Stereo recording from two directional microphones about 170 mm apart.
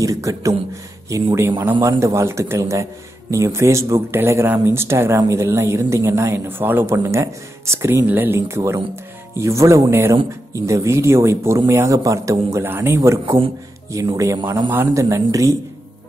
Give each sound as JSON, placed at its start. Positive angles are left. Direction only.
{"t": 0.0, "sound": "a man's voice", "side_deg": -20}